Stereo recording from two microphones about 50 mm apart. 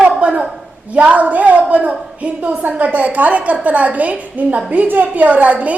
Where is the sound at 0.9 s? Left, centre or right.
Right.